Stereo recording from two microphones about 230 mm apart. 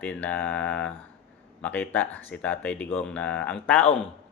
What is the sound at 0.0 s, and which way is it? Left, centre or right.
Mantra, centre.